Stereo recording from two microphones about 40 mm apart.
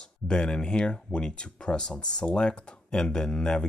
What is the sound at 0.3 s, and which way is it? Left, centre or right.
Speech, left.